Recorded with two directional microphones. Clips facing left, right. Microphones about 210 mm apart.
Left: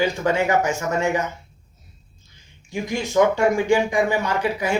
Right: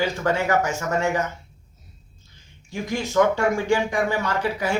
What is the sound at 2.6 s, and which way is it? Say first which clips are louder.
A man's voice: left 1 dB; 15° left (ahead or behind).